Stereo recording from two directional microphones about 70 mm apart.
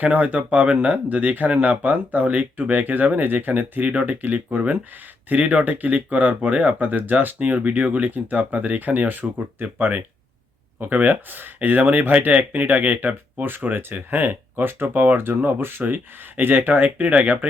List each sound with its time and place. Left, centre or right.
0.0 s speech: right